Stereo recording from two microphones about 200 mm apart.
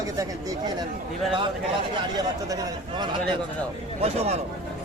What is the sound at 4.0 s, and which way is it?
Speech, 30° right (ahead or behind).